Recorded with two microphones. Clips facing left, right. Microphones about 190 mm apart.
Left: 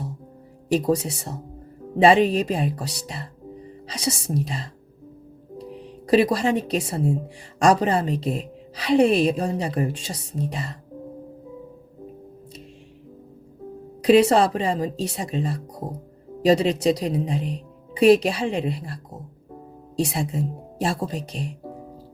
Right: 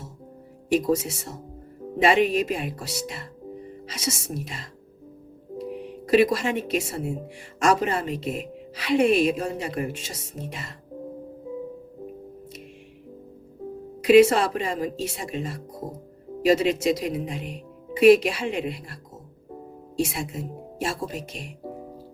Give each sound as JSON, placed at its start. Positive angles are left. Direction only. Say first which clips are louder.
{"t": 0.7, "sound": "a woman's voice", "louder": "left 1 dB", "side_deg": 35}
{"t": 6.1, "sound": "a woman's voice", "louder": "left 1 dB", "side_deg": 35}
{"t": 14.0, "sound": "a woman's voice", "louder": "even", "side_deg": 35}